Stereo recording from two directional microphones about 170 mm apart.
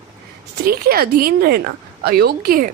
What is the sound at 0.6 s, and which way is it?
Speech, 60° right (ahead or behind).